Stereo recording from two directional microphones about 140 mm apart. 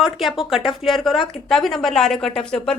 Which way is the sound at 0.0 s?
Centre (ahead or behind).